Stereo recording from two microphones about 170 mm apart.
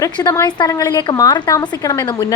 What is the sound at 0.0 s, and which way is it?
A woman's voice, 20° left (ahead or behind).